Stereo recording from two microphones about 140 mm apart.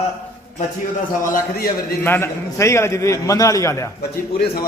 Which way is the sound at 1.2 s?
85° left.